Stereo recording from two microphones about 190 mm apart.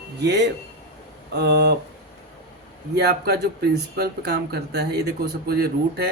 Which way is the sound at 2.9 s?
60° right (ahead or behind).